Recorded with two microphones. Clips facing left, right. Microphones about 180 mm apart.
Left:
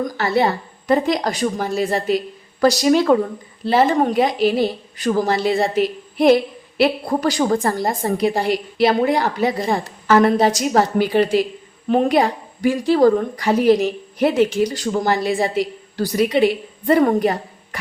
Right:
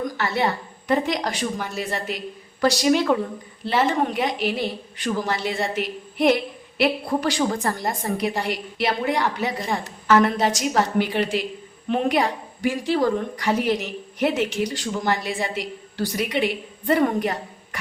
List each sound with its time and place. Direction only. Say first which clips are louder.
0.2 s a woman's voice: left 7 dB; 35° left (ahead or behind)